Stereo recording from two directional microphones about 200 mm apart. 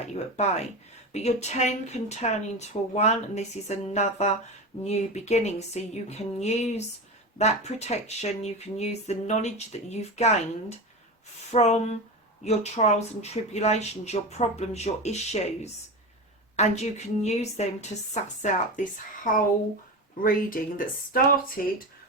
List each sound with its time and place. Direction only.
0.1 s speech: 35° left (ahead or behind)
20.2 s speech: 45° left (ahead or behind)